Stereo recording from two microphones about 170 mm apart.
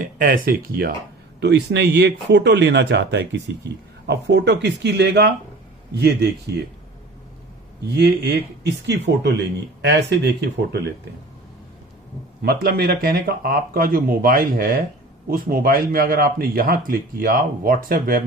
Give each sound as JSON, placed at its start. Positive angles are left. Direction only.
{"t": 0.2, "sound": "speech", "side_deg": -55}
{"t": 1.4, "sound": "speech", "side_deg": -85}
{"t": 4.0, "sound": "speech", "side_deg": -75}
{"t": 7.9, "sound": "a man's voice", "side_deg": -70}
{"t": 12.4, "sound": "speech", "side_deg": -65}